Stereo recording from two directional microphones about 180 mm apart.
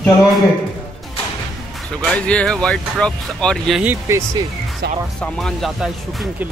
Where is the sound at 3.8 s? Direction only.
15° right (ahead or behind).